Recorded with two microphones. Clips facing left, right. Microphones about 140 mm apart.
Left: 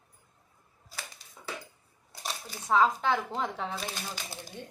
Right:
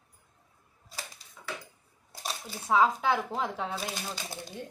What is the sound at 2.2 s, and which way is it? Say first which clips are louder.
Speech: right 1 dB; 5° right (ahead or behind).